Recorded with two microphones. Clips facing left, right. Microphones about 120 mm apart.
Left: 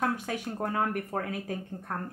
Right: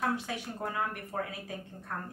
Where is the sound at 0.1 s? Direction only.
50° left (ahead or behind).